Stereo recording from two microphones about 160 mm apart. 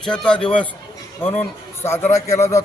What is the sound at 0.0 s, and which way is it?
A man's voice, 5° left (ahead or behind).